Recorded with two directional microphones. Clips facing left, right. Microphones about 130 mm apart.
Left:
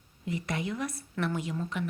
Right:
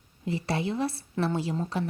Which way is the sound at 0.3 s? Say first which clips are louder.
Right 4 dB; 30° right (ahead or behind).